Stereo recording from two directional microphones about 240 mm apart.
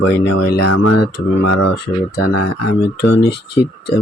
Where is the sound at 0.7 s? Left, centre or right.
Left.